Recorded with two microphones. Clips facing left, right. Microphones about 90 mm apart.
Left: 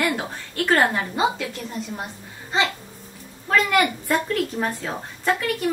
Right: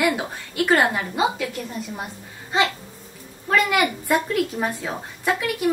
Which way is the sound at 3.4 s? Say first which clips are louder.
Even; 5° right (ahead or behind).